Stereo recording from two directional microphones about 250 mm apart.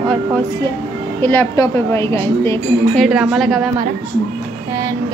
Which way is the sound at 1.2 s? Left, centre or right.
Centre.